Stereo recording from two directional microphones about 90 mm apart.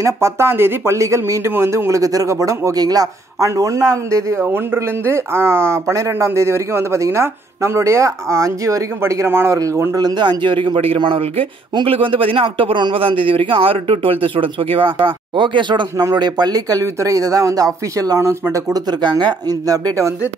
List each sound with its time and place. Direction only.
0.0 s speech: 30° right (ahead or behind)
9.9 s a man's voice: 50° right (ahead or behind)
16.0 s speech: 50° right (ahead or behind)
18.5 s speech: 45° right (ahead or behind)